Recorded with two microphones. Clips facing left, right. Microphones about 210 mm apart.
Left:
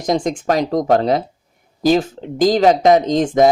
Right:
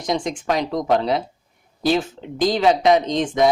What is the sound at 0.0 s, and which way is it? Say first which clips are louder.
Speech: left 5 dB; 45° left (ahead or behind).